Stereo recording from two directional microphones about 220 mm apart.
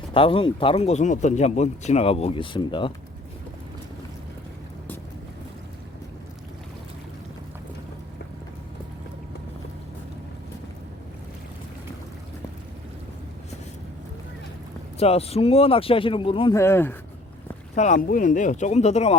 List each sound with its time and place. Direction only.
0.1 s speech: 25° left (ahead or behind)
14.9 s speech: 30° left (ahead or behind)
16.6 s speech: 10° left (ahead or behind)
17.7 s speech: 35° left (ahead or behind)